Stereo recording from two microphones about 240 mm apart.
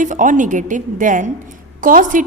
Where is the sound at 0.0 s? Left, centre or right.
Right.